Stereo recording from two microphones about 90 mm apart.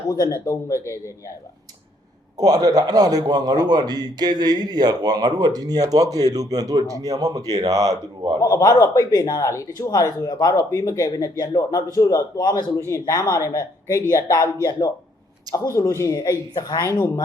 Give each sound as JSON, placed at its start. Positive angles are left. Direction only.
{"t": 0.3, "sound": "speech", "side_deg": 35}
{"t": 2.4, "sound": "a man's voice", "side_deg": -45}
{"t": 8.4, "sound": "speech", "side_deg": 40}
{"t": 10.7, "sound": "speech", "side_deg": 40}